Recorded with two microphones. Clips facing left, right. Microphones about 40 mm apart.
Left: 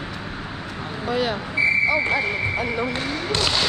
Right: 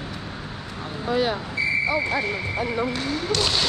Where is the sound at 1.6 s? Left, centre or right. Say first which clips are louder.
Left 6 dB; left.